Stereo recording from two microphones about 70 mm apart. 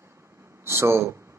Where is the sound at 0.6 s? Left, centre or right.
Right.